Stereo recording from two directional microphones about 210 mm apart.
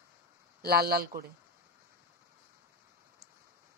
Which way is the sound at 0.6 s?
45° right (ahead or behind).